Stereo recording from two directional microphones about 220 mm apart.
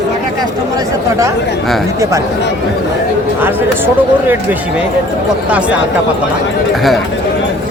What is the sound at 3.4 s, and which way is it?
Speech, 10° right (ahead or behind).